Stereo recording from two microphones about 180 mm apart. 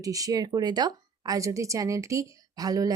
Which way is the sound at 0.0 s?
20° right (ahead or behind).